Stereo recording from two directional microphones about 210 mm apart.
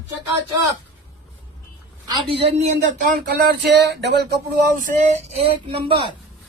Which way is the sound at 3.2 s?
50° right (ahead or behind).